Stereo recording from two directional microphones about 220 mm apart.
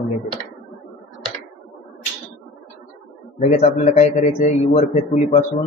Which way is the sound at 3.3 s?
30° left (ahead or behind).